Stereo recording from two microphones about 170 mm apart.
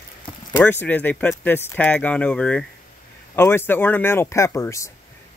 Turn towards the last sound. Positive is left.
turn(degrees=15)  # may be behind; listen again after turning